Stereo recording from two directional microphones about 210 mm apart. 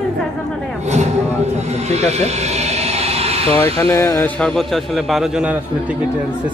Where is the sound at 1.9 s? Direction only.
30° right (ahead or behind).